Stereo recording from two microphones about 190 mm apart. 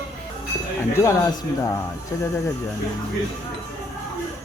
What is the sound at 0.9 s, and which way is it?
Speech, 15° left (ahead or behind).